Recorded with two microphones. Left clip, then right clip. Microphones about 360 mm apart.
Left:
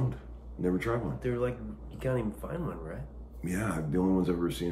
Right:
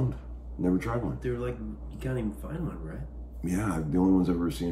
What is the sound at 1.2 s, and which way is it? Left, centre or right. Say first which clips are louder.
Speech: left 1 dB; centre.